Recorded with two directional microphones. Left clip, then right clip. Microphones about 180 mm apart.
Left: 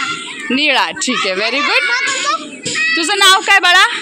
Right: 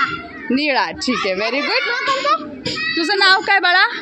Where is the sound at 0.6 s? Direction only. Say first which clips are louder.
Left 5 dB; centre (ahead or behind).